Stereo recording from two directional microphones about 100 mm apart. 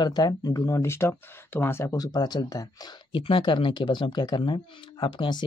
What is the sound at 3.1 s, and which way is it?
Speech, 60° left (ahead or behind).